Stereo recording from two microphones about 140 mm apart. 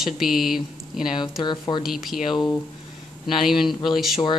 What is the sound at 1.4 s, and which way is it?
Speech, 30° left (ahead or behind).